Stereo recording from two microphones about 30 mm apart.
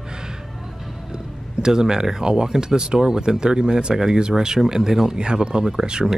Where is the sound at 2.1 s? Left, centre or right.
Right.